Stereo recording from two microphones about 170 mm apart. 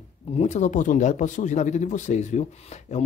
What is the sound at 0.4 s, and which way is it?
Speech, 45° left (ahead or behind).